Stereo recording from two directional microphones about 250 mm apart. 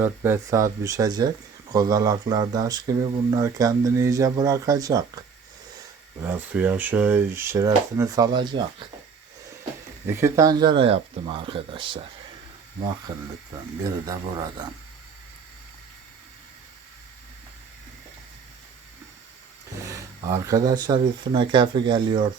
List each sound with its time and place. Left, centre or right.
0.0 s speech: centre
6.2 s speech: centre
10.1 s speech: centre
19.8 s speech: centre